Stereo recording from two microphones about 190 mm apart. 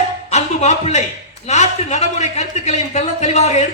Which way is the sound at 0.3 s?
35° left (ahead or behind).